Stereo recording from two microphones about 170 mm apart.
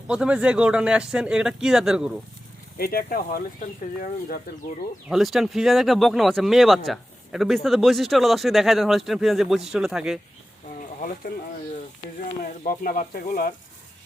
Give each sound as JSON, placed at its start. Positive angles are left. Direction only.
{"t": 0.1, "sound": "speech", "side_deg": -5}
{"t": 2.7, "sound": "speech", "side_deg": 60}
{"t": 5.0, "sound": "speech", "side_deg": 0}
{"t": 12.4, "sound": "speech", "side_deg": 55}